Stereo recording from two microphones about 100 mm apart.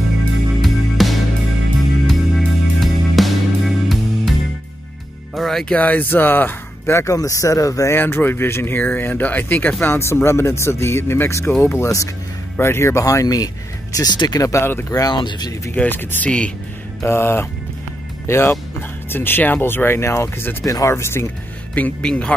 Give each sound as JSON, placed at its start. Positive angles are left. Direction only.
{"t": 0.6, "sound": "music", "side_deg": 0}
{"t": 5.8, "sound": "speech", "side_deg": 15}
{"t": 14.5, "sound": "speech", "side_deg": 25}
{"t": 15.0, "sound": "speech", "side_deg": 45}
{"t": 15.7, "sound": "speech", "side_deg": 20}
{"t": 16.3, "sound": "speech", "side_deg": 10}
{"t": 17.0, "sound": "speech", "side_deg": 25}
{"t": 21.7, "sound": "speech", "side_deg": 15}